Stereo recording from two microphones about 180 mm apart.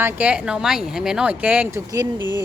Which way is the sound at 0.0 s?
5° right (ahead or behind).